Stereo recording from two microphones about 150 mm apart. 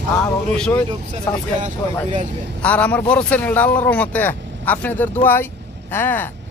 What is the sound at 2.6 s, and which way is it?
A man's voice, 10° left (ahead or behind).